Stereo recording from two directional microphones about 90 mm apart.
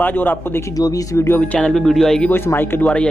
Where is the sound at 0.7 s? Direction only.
40° left (ahead or behind).